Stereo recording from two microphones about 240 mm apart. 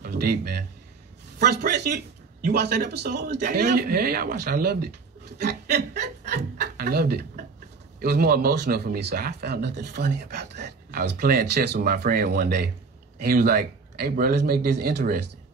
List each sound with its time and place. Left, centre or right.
0.0 s speech: right